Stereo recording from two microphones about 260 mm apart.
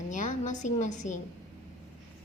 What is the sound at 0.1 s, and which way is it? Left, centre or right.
A woman's voice, left.